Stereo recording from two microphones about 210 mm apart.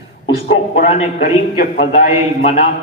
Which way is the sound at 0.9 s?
30° left (ahead or behind).